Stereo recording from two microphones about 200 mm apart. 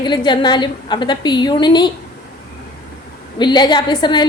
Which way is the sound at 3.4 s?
20° left (ahead or behind).